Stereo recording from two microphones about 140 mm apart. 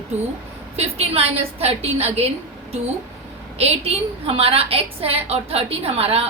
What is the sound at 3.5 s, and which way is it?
A woman's voice, 45° right (ahead or behind).